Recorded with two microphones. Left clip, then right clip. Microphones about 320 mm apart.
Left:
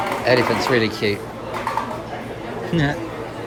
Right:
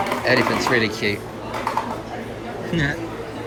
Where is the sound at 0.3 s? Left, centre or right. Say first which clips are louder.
Left 1 dB; centre.